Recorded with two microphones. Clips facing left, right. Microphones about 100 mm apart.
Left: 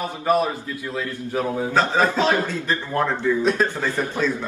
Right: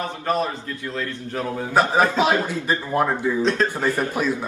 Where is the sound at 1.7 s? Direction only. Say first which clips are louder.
Right 3 dB; 15° right (ahead or behind).